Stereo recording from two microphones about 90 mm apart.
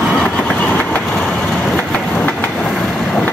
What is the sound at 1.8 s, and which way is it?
Train, 10° left (ahead or behind).